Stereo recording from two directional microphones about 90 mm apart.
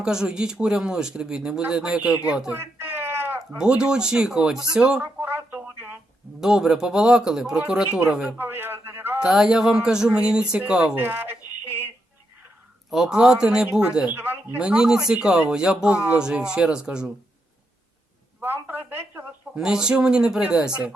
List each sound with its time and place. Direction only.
0.0 s speech: 10° right (ahead or behind)
2.5 s cat: 25° right (ahead or behind)
3.6 s speech: 10° right (ahead or behind)
6.4 s speech: 5° right (ahead or behind)
8.4 s a sound: 25° right (ahead or behind)
9.1 s speech: 5° right (ahead or behind)
10.9 s a sound: 25° right (ahead or behind)
12.9 s speech: 5° right (ahead or behind)
14.1 s speech: 25° right (ahead or behind)
14.6 s speech: 10° right (ahead or behind)
18.4 s telephone: 20° right (ahead or behind)
19.5 s speech: 5° right (ahead or behind)